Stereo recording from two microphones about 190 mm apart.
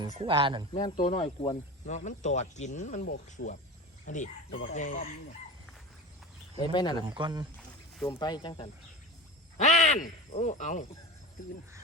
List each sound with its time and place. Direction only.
0.2 s speech: 25° right (ahead or behind)
0.7 s speech: 25° left (ahead or behind)
0.9 s speech: 35° left (ahead or behind)
1.2 s speech: 25° left (ahead or behind)
1.9 s speech: 40° left (ahead or behind)
6.6 s speech: 20° left (ahead or behind)
7.1 s speech: 25° right (ahead or behind)
8.0 s speech: 20° left (ahead or behind)
9.6 s speech: 35° left (ahead or behind)